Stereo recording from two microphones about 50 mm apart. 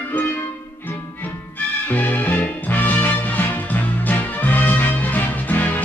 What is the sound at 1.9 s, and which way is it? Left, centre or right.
Music, left.